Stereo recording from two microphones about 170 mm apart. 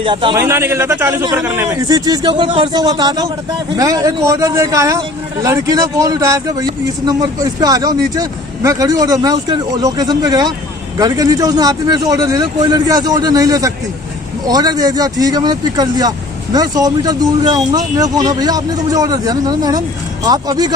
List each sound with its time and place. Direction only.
0.0 s a man's voice: 30° right (ahead or behind)
0.3 s a man's voice: 15° right (ahead or behind)